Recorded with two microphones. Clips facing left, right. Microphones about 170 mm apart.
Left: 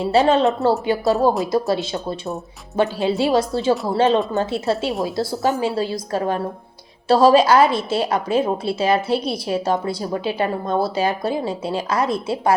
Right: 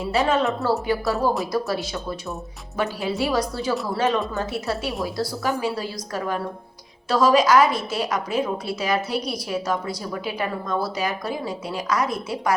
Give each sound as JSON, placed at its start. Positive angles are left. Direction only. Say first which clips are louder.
{"t": 0.0, "sound": "a woman's voice", "louder": "left 5 dB", "side_deg": 30}